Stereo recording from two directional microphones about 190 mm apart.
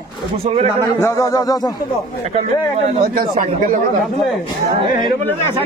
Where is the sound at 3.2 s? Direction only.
45° right (ahead or behind).